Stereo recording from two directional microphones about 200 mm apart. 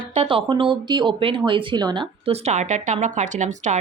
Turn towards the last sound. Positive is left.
turn(degrees=-35)  # may be behind; listen again after turning